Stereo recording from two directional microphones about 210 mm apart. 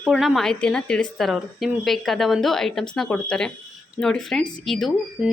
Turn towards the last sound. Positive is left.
turn(degrees=0)  # may be behind; listen again after turning